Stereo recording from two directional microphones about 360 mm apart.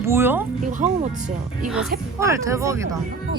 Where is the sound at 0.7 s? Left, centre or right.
Right.